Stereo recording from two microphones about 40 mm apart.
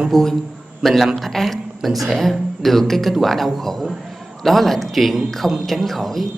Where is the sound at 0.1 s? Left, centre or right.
Centre.